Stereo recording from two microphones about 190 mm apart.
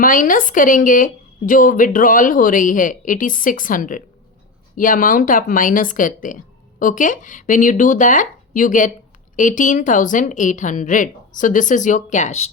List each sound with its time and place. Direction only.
0.0 s speech: 45° left (ahead or behind)